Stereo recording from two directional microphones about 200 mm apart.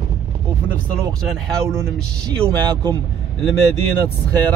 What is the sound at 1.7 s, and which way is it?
Speech, 15° right (ahead or behind).